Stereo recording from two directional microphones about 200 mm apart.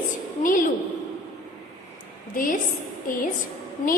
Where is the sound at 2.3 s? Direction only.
40° left (ahead or behind).